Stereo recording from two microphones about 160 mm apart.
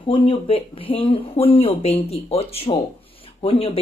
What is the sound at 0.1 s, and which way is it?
Speech, 35° left (ahead or behind).